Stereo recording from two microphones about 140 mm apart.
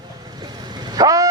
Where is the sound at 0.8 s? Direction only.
30° right (ahead or behind).